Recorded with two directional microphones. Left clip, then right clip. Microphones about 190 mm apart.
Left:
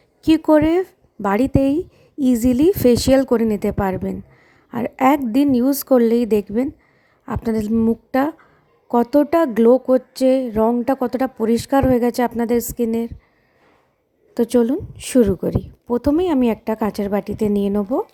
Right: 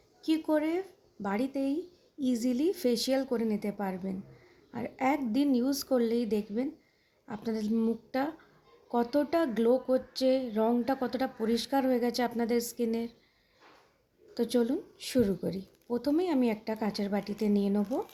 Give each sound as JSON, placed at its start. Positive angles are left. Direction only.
{"t": 0.3, "sound": "speech", "side_deg": 50}
{"t": 14.3, "sound": "speech", "side_deg": 50}